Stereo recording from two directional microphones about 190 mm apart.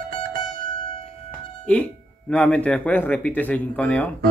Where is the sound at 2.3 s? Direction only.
5° left (ahead or behind).